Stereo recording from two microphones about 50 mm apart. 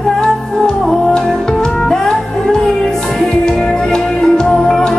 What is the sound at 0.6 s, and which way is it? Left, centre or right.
Music, centre.